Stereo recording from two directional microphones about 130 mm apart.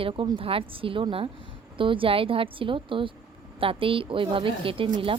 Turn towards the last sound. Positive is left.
turn(degrees=-45)  # may be behind; listen again after turning